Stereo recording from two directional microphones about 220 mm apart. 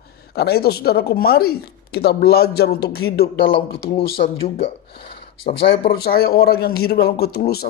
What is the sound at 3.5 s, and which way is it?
Speech, 25° left (ahead or behind).